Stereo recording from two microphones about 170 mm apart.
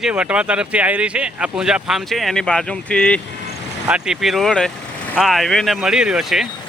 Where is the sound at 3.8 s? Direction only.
5° right (ahead or behind).